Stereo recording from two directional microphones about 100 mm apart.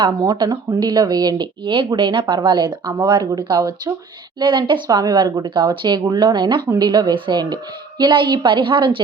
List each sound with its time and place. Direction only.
0.0 s speech: 50° right (ahead or behind)
4.4 s speech: 55° right (ahead or behind)
4.9 s a woman's voice: 45° right (ahead or behind)